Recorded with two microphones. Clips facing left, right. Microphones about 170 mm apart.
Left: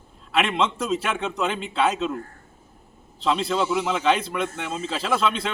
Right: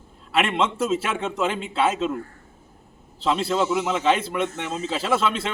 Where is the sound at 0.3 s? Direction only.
5° right (ahead or behind).